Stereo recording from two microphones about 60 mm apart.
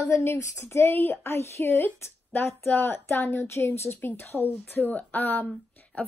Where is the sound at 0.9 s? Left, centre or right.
Left.